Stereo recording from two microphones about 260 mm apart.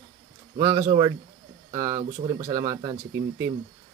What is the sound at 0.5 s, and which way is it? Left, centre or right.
Speech, centre.